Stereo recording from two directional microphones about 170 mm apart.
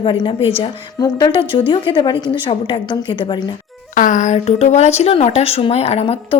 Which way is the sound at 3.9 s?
50° left (ahead or behind).